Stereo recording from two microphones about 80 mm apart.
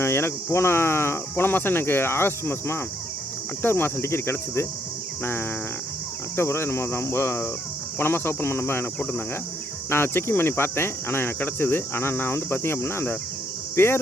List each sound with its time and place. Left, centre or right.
0.0 s speech: left
3.6 s cricket: left
6.3 s speech: left
7.9 s cricket: left
13.7 s speech: left